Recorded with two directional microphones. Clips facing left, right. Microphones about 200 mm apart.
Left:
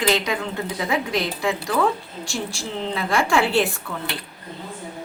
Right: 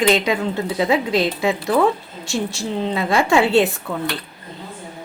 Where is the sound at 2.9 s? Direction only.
20° right (ahead or behind).